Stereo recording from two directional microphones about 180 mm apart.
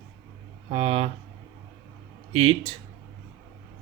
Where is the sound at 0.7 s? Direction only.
30° right (ahead or behind).